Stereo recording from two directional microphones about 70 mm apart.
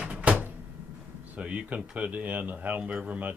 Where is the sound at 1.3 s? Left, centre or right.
Centre.